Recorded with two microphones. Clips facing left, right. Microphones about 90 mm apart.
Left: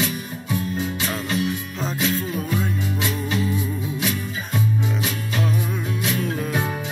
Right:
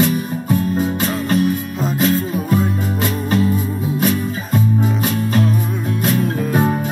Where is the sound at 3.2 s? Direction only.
45° right (ahead or behind).